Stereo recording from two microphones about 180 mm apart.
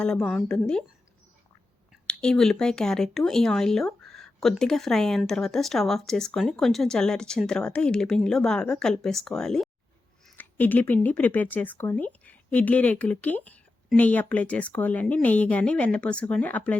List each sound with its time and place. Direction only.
0.0 s speech: 5° left (ahead or behind)
1.9 s speech: 5° left (ahead or behind)